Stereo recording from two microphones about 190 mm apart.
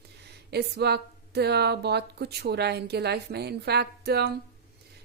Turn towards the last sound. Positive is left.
turn(degrees=-60)  # may be behind; listen again after turning